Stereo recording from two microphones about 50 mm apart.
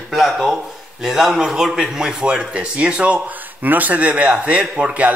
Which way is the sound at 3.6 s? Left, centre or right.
Right.